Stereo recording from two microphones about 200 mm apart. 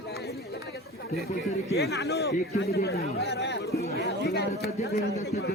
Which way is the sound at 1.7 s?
55° left (ahead or behind).